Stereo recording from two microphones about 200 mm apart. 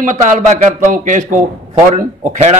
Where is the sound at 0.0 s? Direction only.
40° right (ahead or behind).